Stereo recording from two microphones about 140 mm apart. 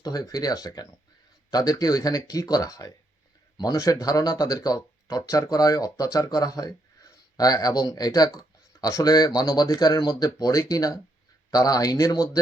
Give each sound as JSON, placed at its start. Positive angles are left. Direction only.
{"t": 0.0, "sound": "speech", "side_deg": 25}